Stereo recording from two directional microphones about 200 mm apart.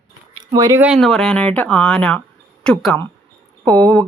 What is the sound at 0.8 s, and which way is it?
Speech, centre (ahead or behind).